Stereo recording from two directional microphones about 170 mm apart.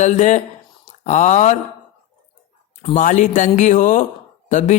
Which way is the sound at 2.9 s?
45° left (ahead or behind).